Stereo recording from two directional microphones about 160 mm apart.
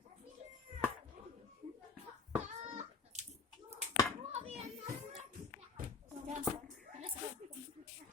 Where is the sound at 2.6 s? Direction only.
45° right (ahead or behind).